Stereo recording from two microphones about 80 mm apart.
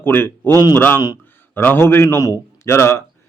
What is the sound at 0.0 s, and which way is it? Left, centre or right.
A man's voice, left.